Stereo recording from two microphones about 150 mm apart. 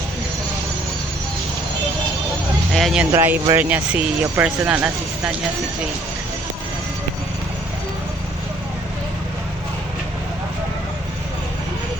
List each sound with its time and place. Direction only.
2.7 s speech: centre (ahead or behind)
3.1 s speech: 15° right (ahead or behind)